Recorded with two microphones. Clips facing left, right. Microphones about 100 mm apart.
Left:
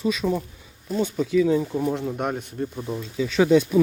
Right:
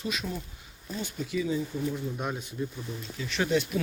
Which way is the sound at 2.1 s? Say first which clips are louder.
Left 7 dB; 55° left (ahead or behind).